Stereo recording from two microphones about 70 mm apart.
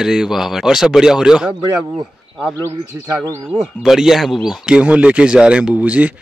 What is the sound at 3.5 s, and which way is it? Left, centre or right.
Speech, centre.